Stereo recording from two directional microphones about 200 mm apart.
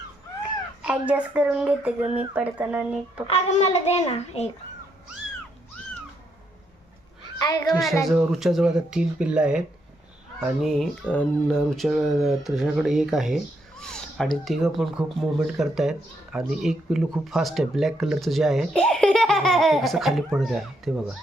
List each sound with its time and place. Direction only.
0.8 s speech: 5° right (ahead or behind)
3.2 s a child's voice: 30° left (ahead or behind)
7.3 s a sound: 20° left (ahead or behind)
7.7 s speech: centre (ahead or behind)